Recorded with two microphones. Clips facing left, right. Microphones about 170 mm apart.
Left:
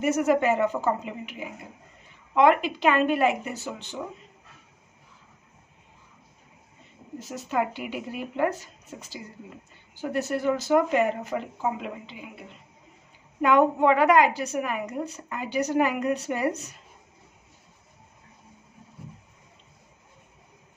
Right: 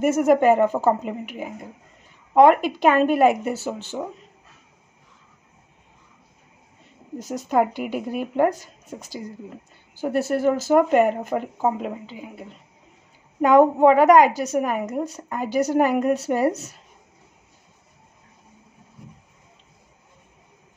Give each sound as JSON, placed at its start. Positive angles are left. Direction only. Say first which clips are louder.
{"t": 0.0, "sound": "speech", "louder": "right 5 dB", "side_deg": -50}
{"t": 7.2, "sound": "a woman's voice", "louder": "right 7 dB", "side_deg": -40}
{"t": 13.4, "sound": "a woman's voice", "louder": "right 6 dB", "side_deg": -35}